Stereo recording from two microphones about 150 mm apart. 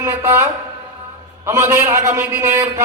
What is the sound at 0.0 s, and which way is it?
Speech, 15° right (ahead or behind).